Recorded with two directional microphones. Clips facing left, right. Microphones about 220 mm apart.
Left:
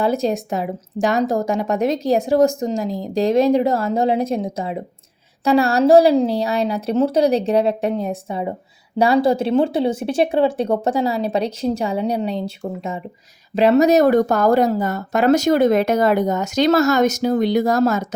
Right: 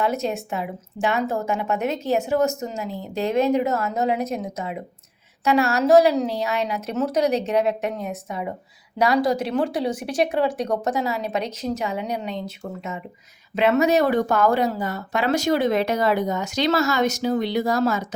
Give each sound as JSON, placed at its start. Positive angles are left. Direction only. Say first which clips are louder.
{"t": 0.0, "sound": "speech", "louder": "left 5 dB", "side_deg": 35}